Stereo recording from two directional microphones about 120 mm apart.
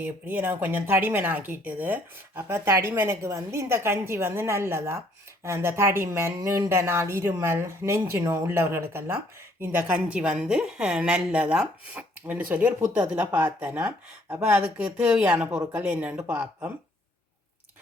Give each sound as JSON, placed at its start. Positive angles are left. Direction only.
{"t": 0.0, "sound": "a woman's voice", "side_deg": -15}